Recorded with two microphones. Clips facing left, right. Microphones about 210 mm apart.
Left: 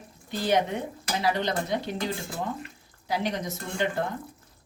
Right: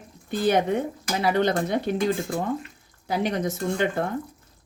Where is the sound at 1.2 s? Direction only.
55° right (ahead or behind).